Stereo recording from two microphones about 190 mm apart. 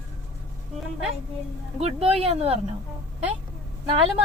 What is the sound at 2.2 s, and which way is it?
Speech, 35° right (ahead or behind).